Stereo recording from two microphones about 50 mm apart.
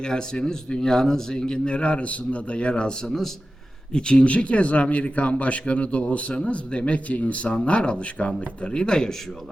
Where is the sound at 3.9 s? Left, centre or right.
Centre.